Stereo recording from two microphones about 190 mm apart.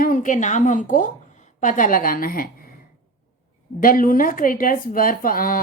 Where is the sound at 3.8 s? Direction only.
50° left (ahead or behind).